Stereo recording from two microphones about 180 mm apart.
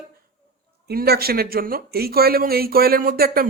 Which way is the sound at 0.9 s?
60° right (ahead or behind).